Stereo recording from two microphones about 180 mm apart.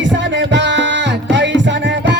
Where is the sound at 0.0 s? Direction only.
85° right.